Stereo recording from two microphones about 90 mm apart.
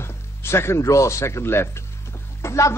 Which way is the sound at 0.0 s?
30° left (ahead or behind).